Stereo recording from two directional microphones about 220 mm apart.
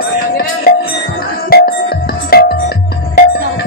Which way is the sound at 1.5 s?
45° left (ahead or behind).